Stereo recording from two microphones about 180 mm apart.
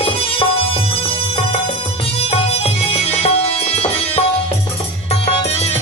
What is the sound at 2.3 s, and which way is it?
Music, 35° left (ahead or behind).